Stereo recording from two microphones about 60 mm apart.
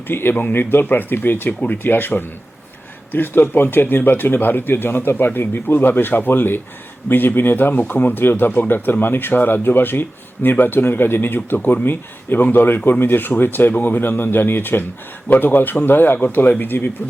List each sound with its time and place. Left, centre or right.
0.1 s speech: left